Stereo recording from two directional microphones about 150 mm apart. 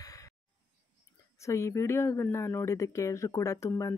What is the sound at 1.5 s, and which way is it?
Speech, 20° left (ahead or behind).